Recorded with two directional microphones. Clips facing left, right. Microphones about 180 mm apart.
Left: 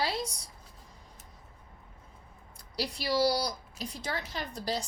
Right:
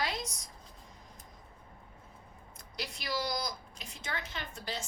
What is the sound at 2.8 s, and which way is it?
Speech, 35° left (ahead or behind).